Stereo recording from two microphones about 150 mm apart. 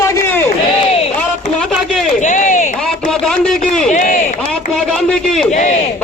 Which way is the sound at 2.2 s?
55° left (ahead or behind).